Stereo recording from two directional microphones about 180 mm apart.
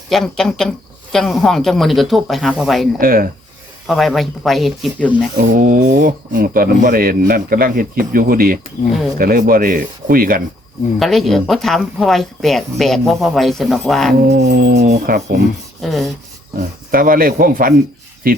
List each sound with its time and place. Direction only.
0.1 s speech: centre (ahead or behind)
3.0 s a sound: 55° right (ahead or behind)
3.8 s speech: centre (ahead or behind)
5.5 s speech: 50° right (ahead or behind)
11.0 s speech: centre (ahead or behind)
14.2 s a sound: 60° right (ahead or behind)
14.8 s speech: 55° right (ahead or behind)
15.8 s speech: centre (ahead or behind)
16.6 s speech: 50° right (ahead or behind)